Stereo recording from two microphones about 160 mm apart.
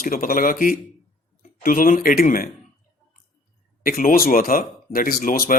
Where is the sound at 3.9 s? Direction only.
65° left (ahead or behind).